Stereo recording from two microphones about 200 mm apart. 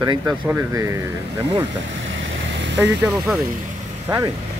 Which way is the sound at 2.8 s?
5° right (ahead or behind).